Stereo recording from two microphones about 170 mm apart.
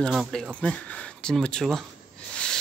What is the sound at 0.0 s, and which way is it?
Speech, centre (ahead or behind).